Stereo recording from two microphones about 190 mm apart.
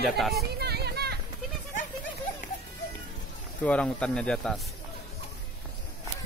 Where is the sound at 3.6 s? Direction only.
5° left (ahead or behind).